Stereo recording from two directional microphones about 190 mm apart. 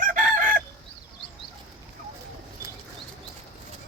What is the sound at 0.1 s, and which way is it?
Chicken, 45° right (ahead or behind).